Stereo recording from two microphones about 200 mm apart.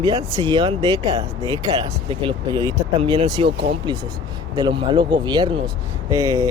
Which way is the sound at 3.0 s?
30° right (ahead or behind).